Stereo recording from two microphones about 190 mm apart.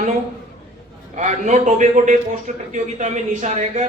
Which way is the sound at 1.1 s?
40° right (ahead or behind).